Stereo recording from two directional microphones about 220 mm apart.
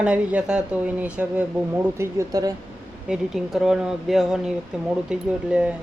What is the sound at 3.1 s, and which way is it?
Speech, centre (ahead or behind).